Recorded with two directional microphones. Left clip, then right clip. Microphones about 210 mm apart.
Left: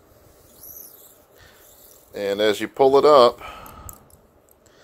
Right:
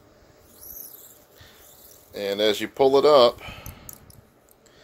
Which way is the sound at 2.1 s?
20° left (ahead or behind).